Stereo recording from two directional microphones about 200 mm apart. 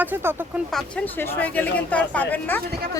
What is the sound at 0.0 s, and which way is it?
Speech, 10° right (ahead or behind).